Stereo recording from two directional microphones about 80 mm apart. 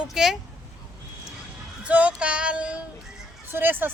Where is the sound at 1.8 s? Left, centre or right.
Centre.